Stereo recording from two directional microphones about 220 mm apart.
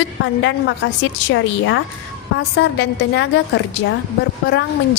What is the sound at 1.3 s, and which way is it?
A woman's voice, 60° left (ahead or behind).